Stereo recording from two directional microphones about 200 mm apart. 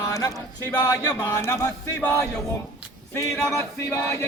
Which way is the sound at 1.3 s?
15° left (ahead or behind).